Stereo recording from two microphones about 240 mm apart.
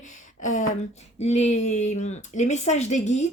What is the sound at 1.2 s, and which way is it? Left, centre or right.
Speech, left.